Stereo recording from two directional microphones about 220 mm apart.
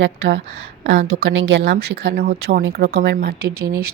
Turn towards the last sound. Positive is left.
turn(degrees=-15)  # may be behind; listen again after turning